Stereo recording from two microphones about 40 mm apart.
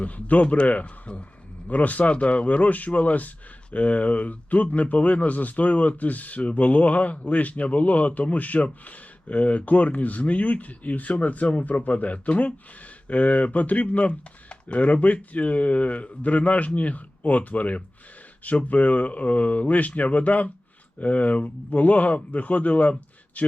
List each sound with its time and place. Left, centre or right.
0.0 s speech: left